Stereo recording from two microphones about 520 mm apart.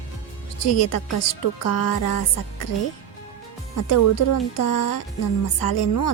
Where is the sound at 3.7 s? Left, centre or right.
Left.